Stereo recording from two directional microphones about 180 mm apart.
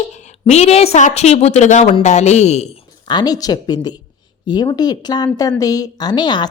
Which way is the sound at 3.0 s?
25° left (ahead or behind).